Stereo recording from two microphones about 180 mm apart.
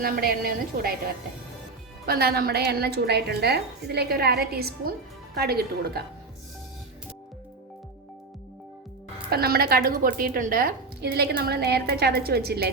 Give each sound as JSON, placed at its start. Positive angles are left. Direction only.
{"t": 0.0, "sound": "a woman's voice", "side_deg": -55}
{"t": 2.0, "sound": "a woman's voice", "side_deg": -60}
{"t": 9.3, "sound": "a woman's voice", "side_deg": -60}